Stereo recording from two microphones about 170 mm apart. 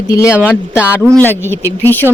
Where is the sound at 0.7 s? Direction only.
10° right (ahead or behind).